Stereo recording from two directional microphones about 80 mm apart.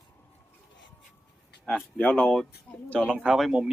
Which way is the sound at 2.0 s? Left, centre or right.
Centre.